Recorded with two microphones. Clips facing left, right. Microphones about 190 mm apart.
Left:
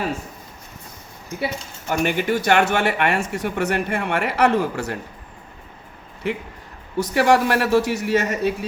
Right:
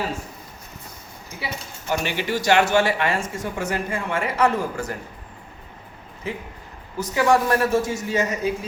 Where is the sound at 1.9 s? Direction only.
50° left (ahead or behind); by 4.9 s 70° left (ahead or behind).